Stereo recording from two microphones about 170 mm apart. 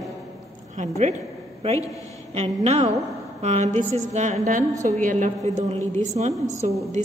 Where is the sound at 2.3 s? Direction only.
40° right (ahead or behind).